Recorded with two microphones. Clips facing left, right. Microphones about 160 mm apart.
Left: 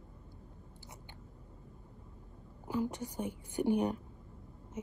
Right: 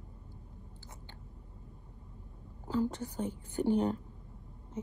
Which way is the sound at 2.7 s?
15° left (ahead or behind).